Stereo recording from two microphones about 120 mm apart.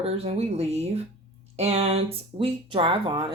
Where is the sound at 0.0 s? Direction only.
55° right (ahead or behind).